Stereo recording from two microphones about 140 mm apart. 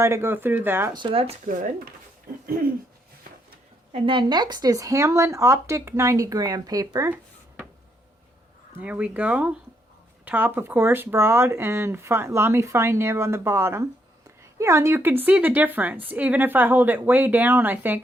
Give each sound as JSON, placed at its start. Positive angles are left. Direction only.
{"t": 0.0, "sound": "speech", "side_deg": -20}
{"t": 0.9, "sound": "speech", "side_deg": -40}
{"t": 1.5, "sound": "speech", "side_deg": -70}
{"t": 3.9, "sound": "speech", "side_deg": -40}
{"t": 8.8, "sound": "speech", "side_deg": -10}